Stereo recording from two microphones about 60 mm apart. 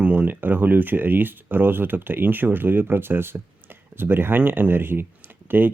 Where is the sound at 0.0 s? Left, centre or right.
Right.